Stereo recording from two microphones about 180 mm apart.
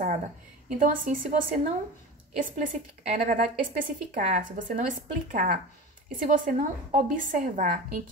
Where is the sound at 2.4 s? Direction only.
50° right (ahead or behind).